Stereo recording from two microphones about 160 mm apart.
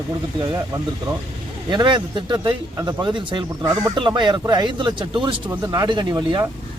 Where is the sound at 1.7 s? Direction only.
30° right (ahead or behind).